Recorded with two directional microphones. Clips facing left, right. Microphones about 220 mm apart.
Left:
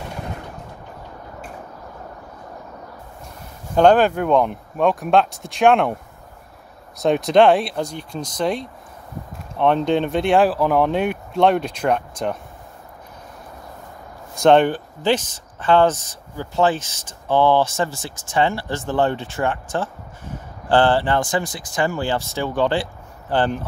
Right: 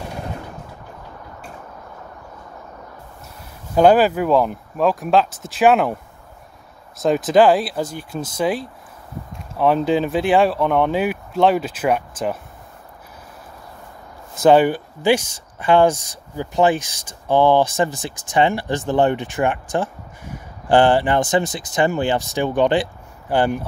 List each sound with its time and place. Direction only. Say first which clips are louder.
3.7 s speech: right 1 dB; 5° right (ahead or behind)
7.0 s speech: even; centre (ahead or behind)
14.3 s speech: right 1 dB; 5° right (ahead or behind)